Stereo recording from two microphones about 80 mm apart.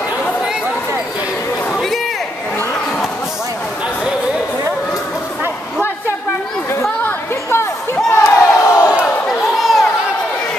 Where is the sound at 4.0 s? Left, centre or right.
Centre.